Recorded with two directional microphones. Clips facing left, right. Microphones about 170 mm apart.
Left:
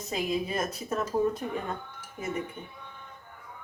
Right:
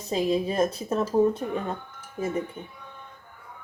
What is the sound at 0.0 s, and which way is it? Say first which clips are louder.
Speech: right 5 dB; 30° right (ahead or behind).